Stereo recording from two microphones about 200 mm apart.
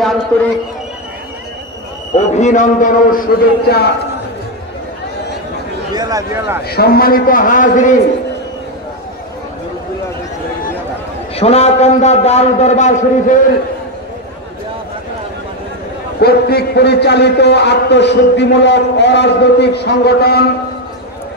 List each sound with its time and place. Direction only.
2.1 s a man's voice: 35° left (ahead or behind)
3.6 s a man's voice: 50° left (ahead or behind)
5.9 s speech: 15° right (ahead or behind)
6.7 s a man's voice: 50° left (ahead or behind)
11.3 s a man's voice: 30° left (ahead or behind)
16.2 s a man's voice: 50° left (ahead or behind)